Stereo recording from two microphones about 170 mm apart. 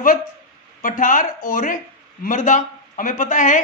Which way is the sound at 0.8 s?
50° left (ahead or behind).